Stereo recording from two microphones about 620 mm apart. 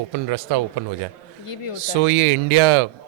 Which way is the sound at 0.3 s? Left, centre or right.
Right.